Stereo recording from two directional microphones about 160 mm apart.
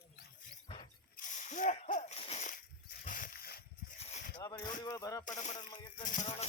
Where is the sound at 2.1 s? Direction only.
40° left (ahead or behind); by 3.6 s 70° left (ahead or behind).